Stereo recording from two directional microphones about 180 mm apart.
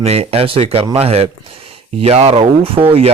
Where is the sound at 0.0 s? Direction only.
35° right (ahead or behind).